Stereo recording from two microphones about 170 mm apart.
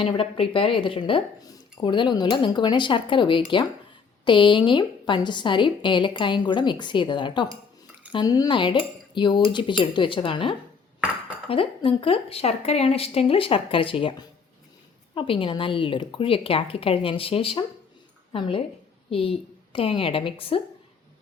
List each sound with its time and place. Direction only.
0.0 s a woman's voice: 30° left (ahead or behind)